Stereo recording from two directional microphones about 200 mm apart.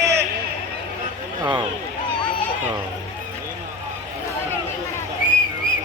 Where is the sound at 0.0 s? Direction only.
15° right (ahead or behind).